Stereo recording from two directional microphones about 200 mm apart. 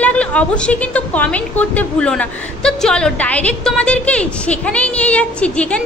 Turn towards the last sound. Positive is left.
turn(degrees=5)  # may be behind; listen again after turning